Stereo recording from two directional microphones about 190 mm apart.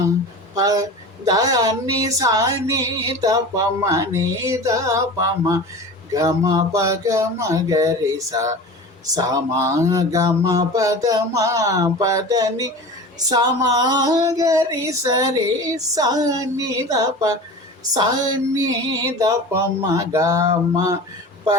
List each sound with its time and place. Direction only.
0.5 s speech: 20° right (ahead or behind)
13.2 s female singing: 20° right (ahead or behind)
19.9 s speech: 20° right (ahead or behind)